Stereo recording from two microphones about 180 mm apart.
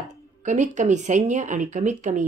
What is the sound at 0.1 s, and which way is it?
Speech, 40° right (ahead or behind).